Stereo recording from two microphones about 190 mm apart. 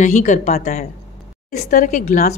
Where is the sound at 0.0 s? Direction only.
40° left (ahead or behind).